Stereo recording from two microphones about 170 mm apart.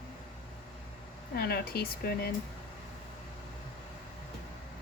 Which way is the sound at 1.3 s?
65° left (ahead or behind).